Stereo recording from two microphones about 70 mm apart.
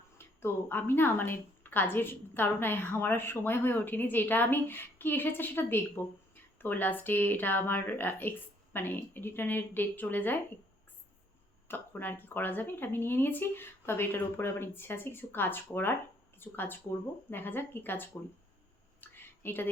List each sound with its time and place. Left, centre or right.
0.2 s a woman's voice: left
11.7 s a woman's voice: left
18.9 s a sound: left